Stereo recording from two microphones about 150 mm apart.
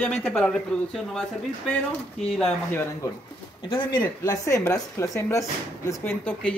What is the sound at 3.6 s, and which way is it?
Speech, 30° left (ahead or behind).